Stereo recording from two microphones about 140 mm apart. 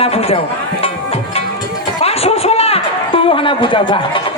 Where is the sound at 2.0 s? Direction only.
45° left (ahead or behind).